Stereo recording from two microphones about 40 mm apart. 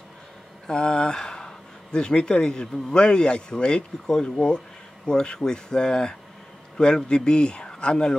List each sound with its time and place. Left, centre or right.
0.7 s speech: left